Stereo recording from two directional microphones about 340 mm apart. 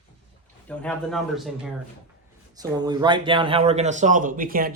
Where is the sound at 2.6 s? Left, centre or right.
Centre.